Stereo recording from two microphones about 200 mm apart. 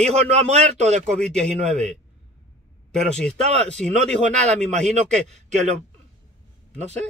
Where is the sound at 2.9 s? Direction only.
5° left (ahead or behind).